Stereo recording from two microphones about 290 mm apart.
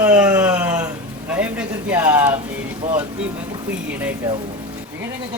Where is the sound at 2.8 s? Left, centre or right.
Right.